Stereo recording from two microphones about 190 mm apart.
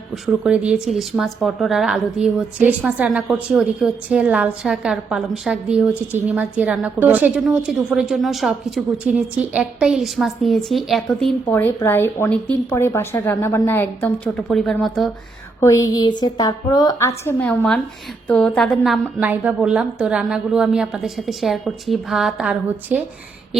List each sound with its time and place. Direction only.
0.1 s speech: 5° right (ahead or behind)
11.5 s speech: 15° left (ahead or behind)
15.6 s a woman's voice: 15° left (ahead or behind); by 23.0 s 5° right (ahead or behind)